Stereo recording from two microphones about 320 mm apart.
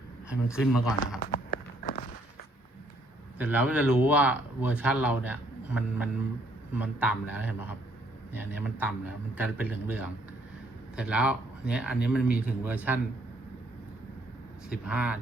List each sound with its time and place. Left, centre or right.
0.5 s speech: centre
1.2 s run: left
3.3 s speech: centre
14.8 s speech: centre